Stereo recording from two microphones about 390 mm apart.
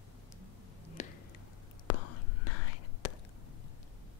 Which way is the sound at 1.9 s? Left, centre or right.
Left.